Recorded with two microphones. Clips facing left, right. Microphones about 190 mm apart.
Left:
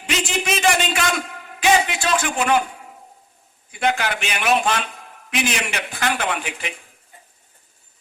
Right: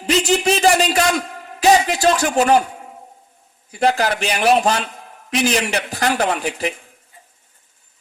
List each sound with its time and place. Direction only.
0.0 s speech: 35° right (ahead or behind)